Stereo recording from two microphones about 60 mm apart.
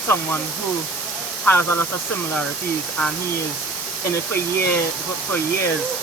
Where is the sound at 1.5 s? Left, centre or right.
Left.